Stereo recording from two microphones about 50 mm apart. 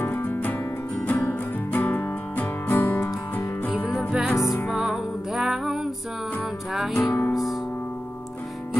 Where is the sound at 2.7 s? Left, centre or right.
Left.